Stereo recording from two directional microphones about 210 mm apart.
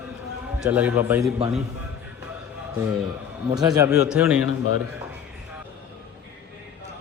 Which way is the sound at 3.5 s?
15° right (ahead or behind).